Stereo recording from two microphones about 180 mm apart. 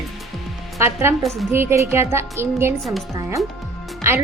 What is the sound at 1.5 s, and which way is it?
A woman's voice, 15° right (ahead or behind).